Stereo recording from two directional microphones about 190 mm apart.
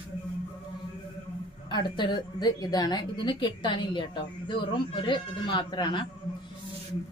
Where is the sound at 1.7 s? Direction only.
25° left (ahead or behind).